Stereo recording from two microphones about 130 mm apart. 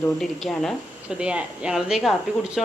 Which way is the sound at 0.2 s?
Centre (ahead or behind).